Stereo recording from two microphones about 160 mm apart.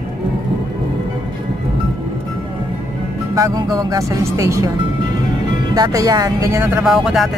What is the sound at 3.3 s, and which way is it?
Speech, 20° right (ahead or behind).